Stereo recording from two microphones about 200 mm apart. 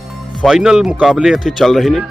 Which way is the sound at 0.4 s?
5° right (ahead or behind).